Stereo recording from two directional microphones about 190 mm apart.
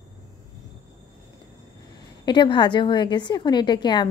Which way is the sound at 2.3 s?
25° left (ahead or behind).